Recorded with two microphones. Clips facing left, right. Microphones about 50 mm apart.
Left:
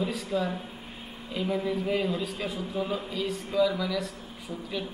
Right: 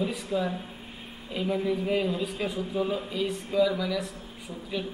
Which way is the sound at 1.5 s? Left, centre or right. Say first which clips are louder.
Right 2 dB; centre.